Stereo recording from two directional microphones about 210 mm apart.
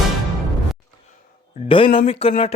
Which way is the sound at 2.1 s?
25° left (ahead or behind).